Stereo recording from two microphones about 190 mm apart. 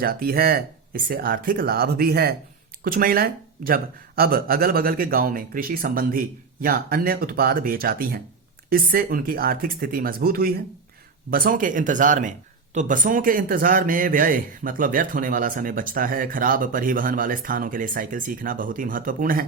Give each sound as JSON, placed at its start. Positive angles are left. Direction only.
{"t": 0.0, "sound": "a man's voice", "side_deg": -50}